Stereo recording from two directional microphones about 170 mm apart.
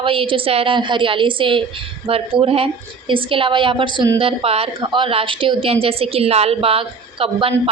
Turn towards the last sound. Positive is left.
turn(degrees=-35)  # may be behind; listen again after turning